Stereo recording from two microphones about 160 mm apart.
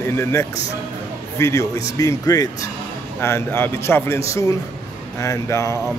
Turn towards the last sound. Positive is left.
turn(degrees=20)  # may be behind; listen again after turning